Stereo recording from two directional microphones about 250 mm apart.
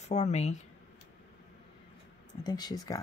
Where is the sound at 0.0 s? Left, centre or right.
Left.